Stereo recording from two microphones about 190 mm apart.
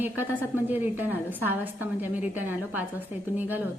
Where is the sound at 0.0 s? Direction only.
10° right (ahead or behind).